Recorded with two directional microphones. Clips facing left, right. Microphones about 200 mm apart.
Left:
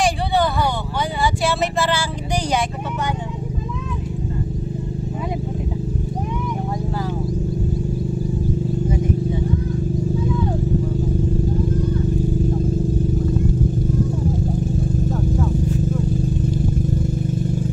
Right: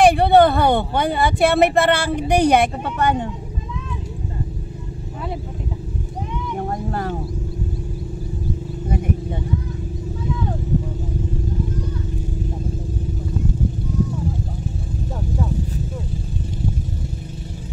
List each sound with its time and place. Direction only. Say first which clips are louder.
0.0 s vehicle: right 7 dB; 60° right (ahead or behind)
8.8 s vehicle: right 2 dB; 60° right (ahead or behind)